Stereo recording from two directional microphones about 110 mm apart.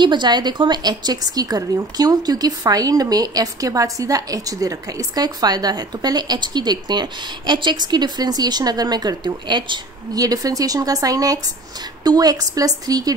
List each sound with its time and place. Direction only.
0.0 s a woman's voice: 45° right (ahead or behind)